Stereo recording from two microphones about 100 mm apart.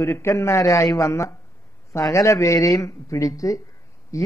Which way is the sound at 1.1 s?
30° left (ahead or behind).